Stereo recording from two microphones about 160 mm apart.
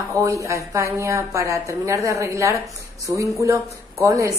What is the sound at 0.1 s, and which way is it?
A woman's voice, 20° right (ahead or behind).